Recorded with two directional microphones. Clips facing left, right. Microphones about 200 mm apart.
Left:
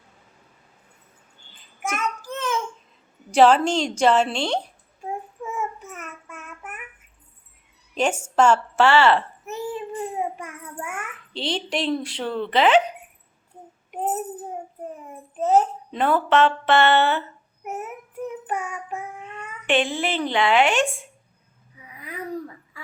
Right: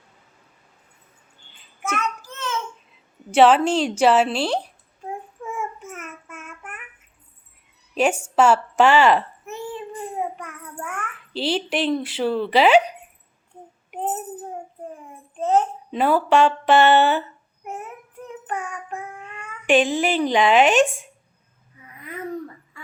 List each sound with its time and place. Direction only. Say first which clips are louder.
1.8 s a sound: right 1 dB; 15° left (ahead or behind)
3.3 s speech: right 1 dB; 5° right (ahead or behind)
6.2 s child singing: even; centre (ahead or behind)
8.4 s a woman's voice: right 1 dB; 10° right (ahead or behind)
9.5 s child singing: left 3 dB; centre (ahead or behind)
11.3 s speech: right 3 dB; 5° right (ahead or behind)
15.4 s a sound: left 1 dB; 5° left (ahead or behind)
16.0 s a woman's voice: right 2 dB; 10° right (ahead or behind)
17.6 s child singing: left 2 dB; 5° left (ahead or behind)
19.6 s a woman's voice: right 4 dB; 15° right (ahead or behind)
21.8 s a sound: right 1 dB; centre (ahead or behind)